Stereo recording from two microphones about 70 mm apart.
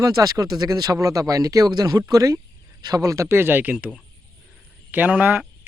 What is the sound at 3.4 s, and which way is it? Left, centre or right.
Speech, right.